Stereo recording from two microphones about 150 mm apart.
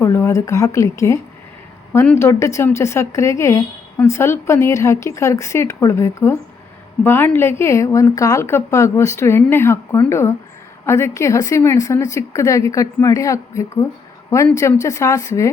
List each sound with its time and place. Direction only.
0.0 s a woman's voice: 20° left (ahead or behind)